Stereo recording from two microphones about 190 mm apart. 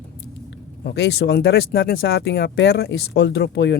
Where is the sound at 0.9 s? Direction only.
65° left (ahead or behind).